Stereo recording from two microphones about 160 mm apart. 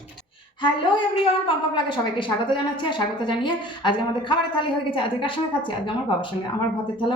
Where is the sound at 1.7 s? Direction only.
30° left (ahead or behind).